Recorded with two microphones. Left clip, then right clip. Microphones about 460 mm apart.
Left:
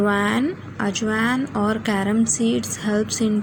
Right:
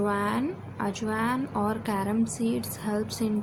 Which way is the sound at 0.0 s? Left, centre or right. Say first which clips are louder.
Left 7 dB; left.